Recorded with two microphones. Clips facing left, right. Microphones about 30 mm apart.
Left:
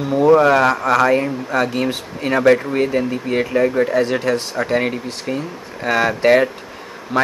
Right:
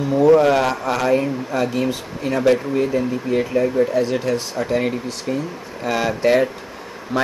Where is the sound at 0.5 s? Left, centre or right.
Left.